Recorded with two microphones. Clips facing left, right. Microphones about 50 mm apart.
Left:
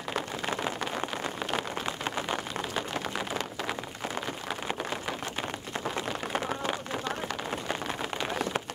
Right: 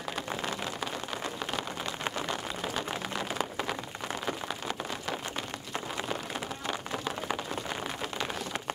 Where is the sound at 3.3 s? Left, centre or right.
Centre.